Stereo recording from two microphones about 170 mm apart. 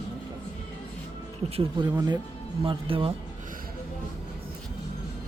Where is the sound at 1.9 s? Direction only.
20° right (ahead or behind).